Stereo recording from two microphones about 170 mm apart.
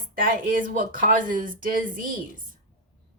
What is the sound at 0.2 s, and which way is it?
Speech, 55° right (ahead or behind).